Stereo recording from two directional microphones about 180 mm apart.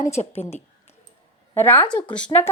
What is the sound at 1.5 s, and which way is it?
Speech, 10° left (ahead or behind).